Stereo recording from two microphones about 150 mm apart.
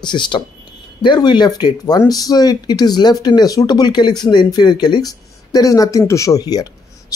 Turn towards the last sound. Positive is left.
turn(degrees=25)  # may be behind; listen again after turning